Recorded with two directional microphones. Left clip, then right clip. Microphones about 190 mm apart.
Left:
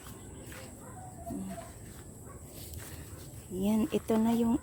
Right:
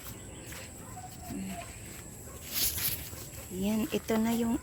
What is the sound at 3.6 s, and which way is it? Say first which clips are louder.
Speech: left 1 dB; 25° left (ahead or behind).